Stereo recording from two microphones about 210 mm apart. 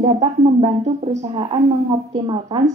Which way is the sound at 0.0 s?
25° right (ahead or behind).